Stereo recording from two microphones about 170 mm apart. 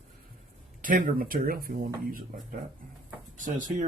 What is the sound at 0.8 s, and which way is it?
Speech, 55° right (ahead or behind).